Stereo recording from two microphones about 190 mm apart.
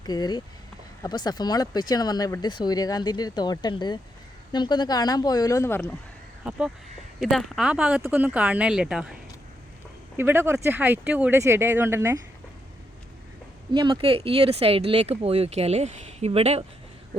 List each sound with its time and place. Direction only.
0.0 s speech: 20° left (ahead or behind)
6.5 s speech: 5° right (ahead or behind)
10.2 s speech: 10° right (ahead or behind)
13.7 s speech: 25° right (ahead or behind)